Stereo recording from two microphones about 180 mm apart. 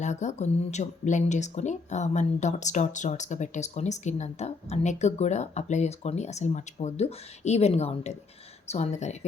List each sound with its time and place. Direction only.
0.0 s speech: 40° left (ahead or behind)